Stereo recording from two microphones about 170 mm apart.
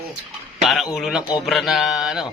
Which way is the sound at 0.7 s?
Centre (ahead or behind).